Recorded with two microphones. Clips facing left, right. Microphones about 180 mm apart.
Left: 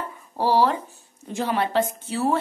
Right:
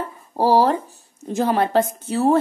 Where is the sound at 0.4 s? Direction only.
40° right (ahead or behind).